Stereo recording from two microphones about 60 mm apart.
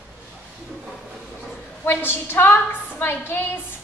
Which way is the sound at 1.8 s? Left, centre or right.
Left.